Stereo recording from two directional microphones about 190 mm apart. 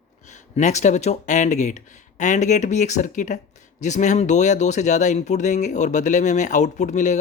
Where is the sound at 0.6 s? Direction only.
40° left (ahead or behind).